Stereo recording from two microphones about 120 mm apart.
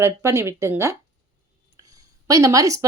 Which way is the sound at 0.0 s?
20° right (ahead or behind).